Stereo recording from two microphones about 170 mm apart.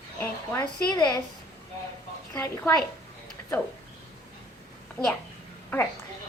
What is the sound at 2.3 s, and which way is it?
Speech, 20° left (ahead or behind).